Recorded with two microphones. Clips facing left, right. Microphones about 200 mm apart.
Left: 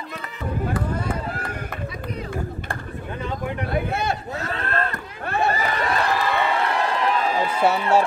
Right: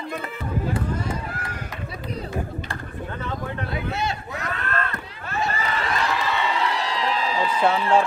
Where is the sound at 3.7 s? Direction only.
55° left (ahead or behind).